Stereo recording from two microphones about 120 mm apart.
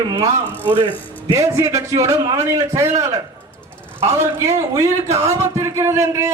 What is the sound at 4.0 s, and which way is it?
A man's voice, 20° right (ahead or behind).